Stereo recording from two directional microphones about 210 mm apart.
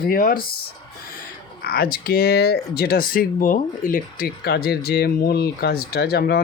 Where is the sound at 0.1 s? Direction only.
40° left (ahead or behind).